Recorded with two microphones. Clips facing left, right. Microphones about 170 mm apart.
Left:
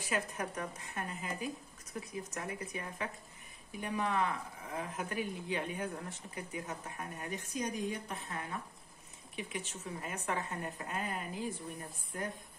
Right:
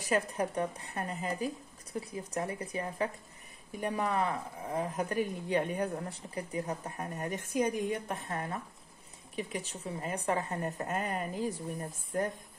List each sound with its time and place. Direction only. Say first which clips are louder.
0.0 s a woman's voice: right 6 dB; 35° right (ahead or behind)